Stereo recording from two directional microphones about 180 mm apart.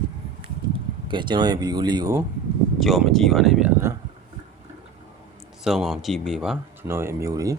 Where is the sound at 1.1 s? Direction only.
25° right (ahead or behind).